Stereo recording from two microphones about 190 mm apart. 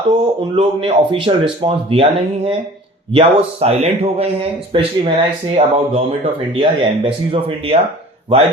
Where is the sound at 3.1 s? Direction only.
30° right (ahead or behind).